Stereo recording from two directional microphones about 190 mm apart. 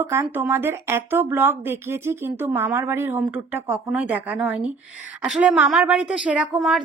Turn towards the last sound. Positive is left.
turn(degrees=-5)  # may be behind; listen again after turning